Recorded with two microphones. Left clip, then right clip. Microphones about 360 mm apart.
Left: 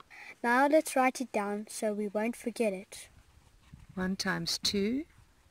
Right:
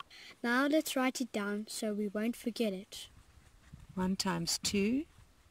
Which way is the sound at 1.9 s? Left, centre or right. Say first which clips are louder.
Left 4 dB; left.